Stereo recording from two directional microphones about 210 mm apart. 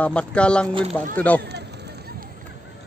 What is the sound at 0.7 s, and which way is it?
Speech, 25° right (ahead or behind).